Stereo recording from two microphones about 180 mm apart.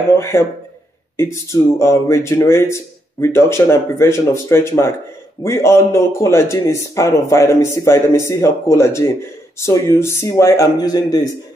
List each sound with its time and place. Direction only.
1.1 s speech: 15° left (ahead or behind)